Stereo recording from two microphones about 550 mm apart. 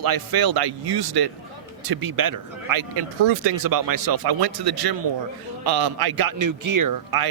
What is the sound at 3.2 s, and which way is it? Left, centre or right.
Speech, right.